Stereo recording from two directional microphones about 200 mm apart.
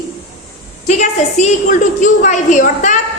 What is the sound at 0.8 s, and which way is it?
A woman's voice, 35° left (ahead or behind).